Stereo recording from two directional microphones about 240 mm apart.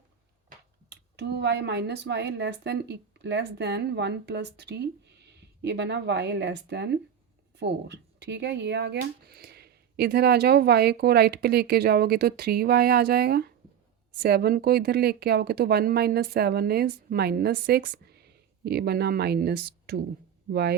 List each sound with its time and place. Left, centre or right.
0.9 s speech: right